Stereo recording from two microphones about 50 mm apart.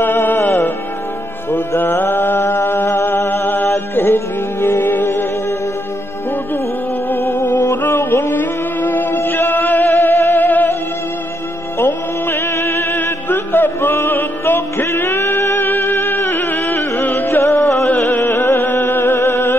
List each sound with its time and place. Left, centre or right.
0.0 s music: left
1.8 s music: left
3.3 s a sound: left
3.6 s music: left
7.1 s music: left
10.3 s music: left
11.8 s music: left
12.9 s music: left
17.8 s music: left